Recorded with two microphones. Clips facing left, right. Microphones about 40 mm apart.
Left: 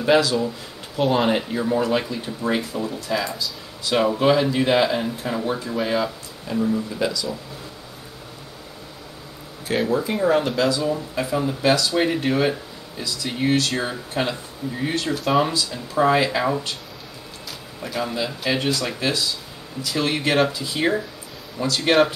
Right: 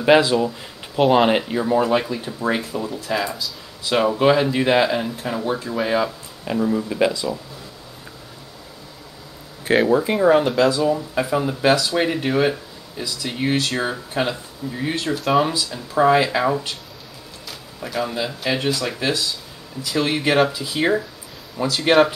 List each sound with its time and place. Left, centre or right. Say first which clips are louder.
0.0 s speech: right 3 dB; right; by 6.1 s centre
6.4 s speech: right 2 dB; right
9.8 s speech: right 4 dB; centre
10.4 s speech: right 4 dB; centre